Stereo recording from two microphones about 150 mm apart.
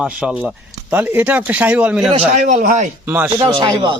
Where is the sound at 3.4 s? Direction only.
30° right (ahead or behind).